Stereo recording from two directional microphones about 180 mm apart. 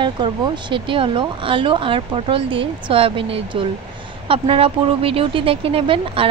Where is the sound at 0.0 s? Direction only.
25° right (ahead or behind).